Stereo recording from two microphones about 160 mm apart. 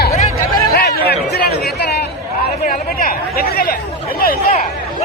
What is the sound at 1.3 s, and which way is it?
Chatter, 90° left.